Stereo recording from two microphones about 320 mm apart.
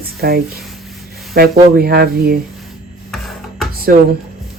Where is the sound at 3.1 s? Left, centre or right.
Centre.